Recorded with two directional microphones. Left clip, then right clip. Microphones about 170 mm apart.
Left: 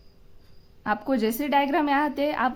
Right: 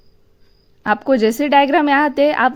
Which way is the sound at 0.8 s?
40° right (ahead or behind).